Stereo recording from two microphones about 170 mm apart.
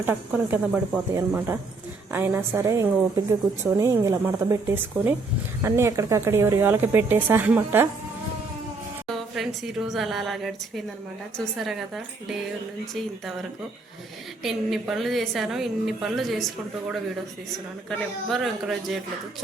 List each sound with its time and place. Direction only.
0.0 s a woman's voice: 10° right (ahead or behind)
9.1 s a woman's voice: centre (ahead or behind)
14.4 s a woman's voice: centre (ahead or behind)
17.8 s a woman's voice: centre (ahead or behind)